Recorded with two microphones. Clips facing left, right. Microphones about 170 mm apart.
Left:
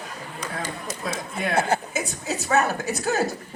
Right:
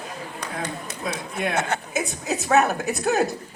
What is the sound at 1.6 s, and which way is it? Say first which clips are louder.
Speech: left 6 dB; 30° left (ahead or behind).